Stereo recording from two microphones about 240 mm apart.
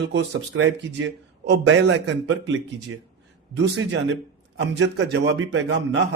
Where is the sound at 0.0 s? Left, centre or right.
Right.